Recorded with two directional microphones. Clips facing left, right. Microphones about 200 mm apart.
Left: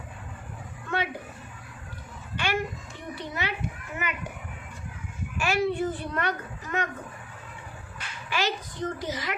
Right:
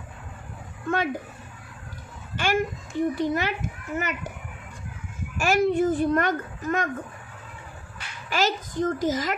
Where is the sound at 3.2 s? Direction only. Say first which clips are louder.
Right 8 dB; 45° right (ahead or behind).